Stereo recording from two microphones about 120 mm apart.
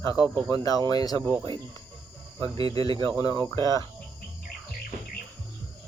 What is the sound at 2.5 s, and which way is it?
Speech, 50° right (ahead or behind).